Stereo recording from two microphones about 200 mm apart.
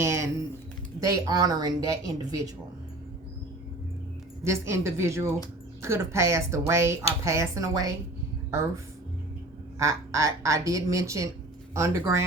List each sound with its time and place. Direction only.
0.0 s typing: 15° right (ahead or behind)
0.9 s speech: 15° right (ahead or behind)
4.4 s speech: 15° right (ahead or behind)